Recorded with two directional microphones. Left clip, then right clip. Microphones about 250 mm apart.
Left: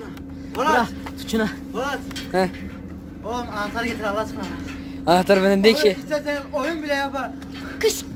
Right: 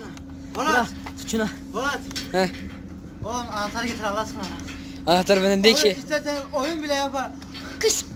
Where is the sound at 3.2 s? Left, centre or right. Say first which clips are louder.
Left 1 dB; right.